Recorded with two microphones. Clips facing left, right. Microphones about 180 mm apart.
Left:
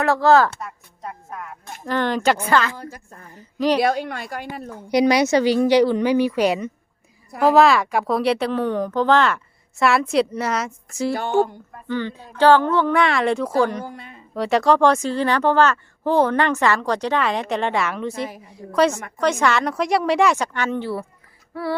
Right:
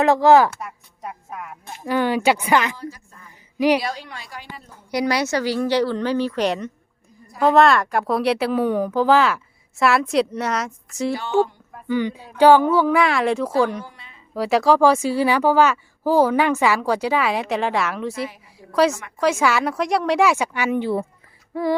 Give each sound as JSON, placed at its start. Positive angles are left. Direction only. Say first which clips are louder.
{"t": 0.0, "sound": "speech", "louder": "right 2 dB", "side_deg": -15}
{"t": 2.7, "sound": "a woman's voice", "louder": "right 2 dB", "side_deg": 50}
{"t": 3.3, "sound": "a sound", "louder": "right 2 dB", "side_deg": -10}
{"t": 3.8, "sound": "a woman's voice", "louder": "left 8 dB", "side_deg": 55}
{"t": 4.9, "sound": "speech", "louder": "left 5 dB", "side_deg": 20}
{"t": 11.1, "sound": "a woman's voice", "louder": "even", "side_deg": 50}
{"t": 11.7, "sound": "speech", "louder": "right 3 dB", "side_deg": -10}
{"t": 13.8, "sound": "a woman's voice", "louder": "left 8 dB", "side_deg": 50}
{"t": 14.3, "sound": "speech", "louder": "even", "side_deg": 0}
{"t": 21.5, "sound": "female singing", "louder": "right 4 dB", "side_deg": -15}